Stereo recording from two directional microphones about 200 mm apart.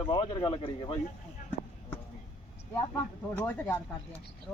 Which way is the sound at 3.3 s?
10° left (ahead or behind).